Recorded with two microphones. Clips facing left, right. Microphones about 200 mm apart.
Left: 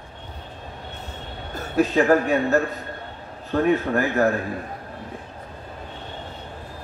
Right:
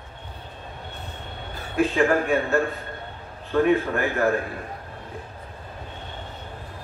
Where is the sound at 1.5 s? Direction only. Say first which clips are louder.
Left 2 dB; 40° left (ahead or behind).